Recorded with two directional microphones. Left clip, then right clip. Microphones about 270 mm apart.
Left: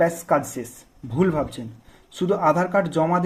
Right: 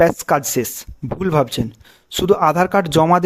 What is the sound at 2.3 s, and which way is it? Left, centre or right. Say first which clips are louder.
Speech: right 5 dB; right.